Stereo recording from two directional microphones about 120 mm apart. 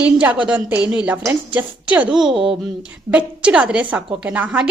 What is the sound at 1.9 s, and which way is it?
Speech, 10° right (ahead or behind).